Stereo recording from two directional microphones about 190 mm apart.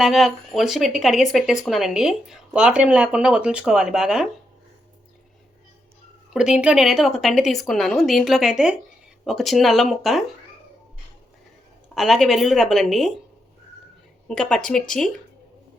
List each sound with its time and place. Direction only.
0.0 s speech: centre (ahead or behind)
6.3 s speech: 5° right (ahead or behind)
11.9 s speech: centre (ahead or behind)
14.3 s speech: 5° left (ahead or behind)